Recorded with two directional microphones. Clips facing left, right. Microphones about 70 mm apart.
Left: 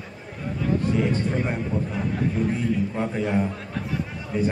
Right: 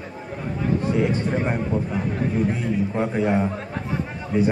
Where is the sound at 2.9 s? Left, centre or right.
Centre.